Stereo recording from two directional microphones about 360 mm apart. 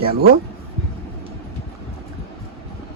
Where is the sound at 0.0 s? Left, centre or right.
Centre.